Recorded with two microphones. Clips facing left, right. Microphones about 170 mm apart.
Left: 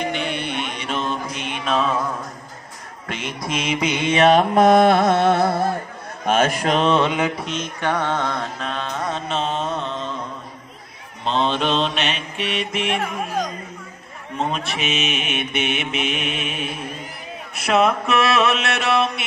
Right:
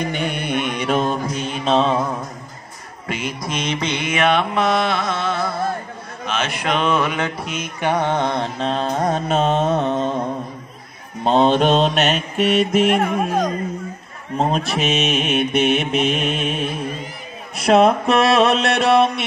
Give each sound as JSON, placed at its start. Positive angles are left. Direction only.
{"t": 0.1, "sound": "mantra", "side_deg": -45}
{"t": 3.1, "sound": "mantra", "side_deg": -5}
{"t": 4.0, "sound": "music", "side_deg": 30}
{"t": 7.1, "sound": "mantra", "side_deg": 15}
{"t": 7.3, "sound": "mantra", "side_deg": -5}
{"t": 14.3, "sound": "mantra", "side_deg": -35}
{"t": 15.3, "sound": "mantra", "side_deg": 0}
{"t": 15.9, "sound": "mantra", "side_deg": -35}
{"t": 17.6, "sound": "mantra", "side_deg": -35}